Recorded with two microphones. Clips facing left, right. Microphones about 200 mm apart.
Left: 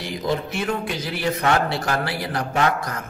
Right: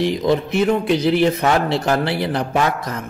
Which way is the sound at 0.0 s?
20° right (ahead or behind).